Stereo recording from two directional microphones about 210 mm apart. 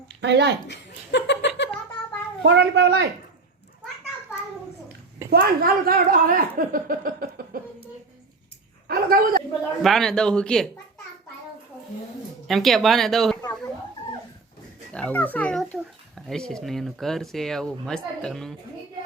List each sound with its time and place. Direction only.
0.2 s speech: 55° right (ahead or behind)
0.7 s laughter: 55° left (ahead or behind)
2.4 s speech: 55° right (ahead or behind)
5.3 s speech: 45° right (ahead or behind)
8.9 s speech: 45° right (ahead or behind)
9.8 s a child's voice: centre (ahead or behind)
12.5 s a child's voice: centre (ahead or behind)
14.9 s a child's voice: 5° left (ahead or behind)